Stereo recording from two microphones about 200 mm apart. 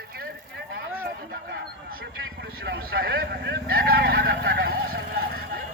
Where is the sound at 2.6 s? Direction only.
55° right (ahead or behind).